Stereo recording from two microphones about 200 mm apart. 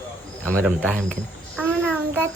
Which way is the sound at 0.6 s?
5° left (ahead or behind).